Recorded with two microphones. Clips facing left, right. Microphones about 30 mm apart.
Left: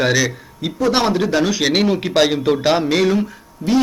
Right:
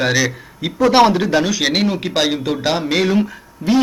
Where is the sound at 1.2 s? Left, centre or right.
Centre.